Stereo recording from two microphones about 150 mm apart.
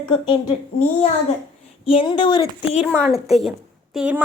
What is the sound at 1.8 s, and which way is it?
Speech, 35° left (ahead or behind).